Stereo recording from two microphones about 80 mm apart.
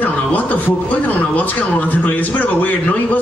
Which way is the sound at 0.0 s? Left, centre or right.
Centre.